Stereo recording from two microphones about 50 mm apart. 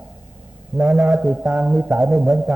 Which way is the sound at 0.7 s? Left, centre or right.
Right.